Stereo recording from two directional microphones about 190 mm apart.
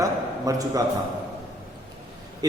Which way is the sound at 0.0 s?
20° right (ahead or behind).